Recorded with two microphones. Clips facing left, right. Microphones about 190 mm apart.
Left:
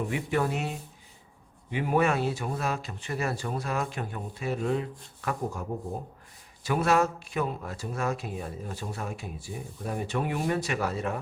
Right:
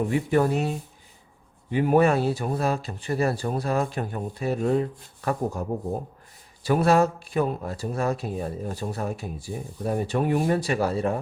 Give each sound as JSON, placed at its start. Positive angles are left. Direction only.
{"t": 0.1, "sound": "speech", "side_deg": -40}